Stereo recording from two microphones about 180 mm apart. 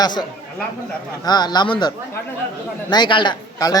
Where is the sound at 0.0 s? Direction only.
25° left (ahead or behind).